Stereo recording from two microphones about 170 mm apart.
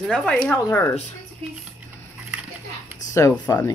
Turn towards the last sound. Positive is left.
turn(degrees=15)  # may be behind; listen again after turning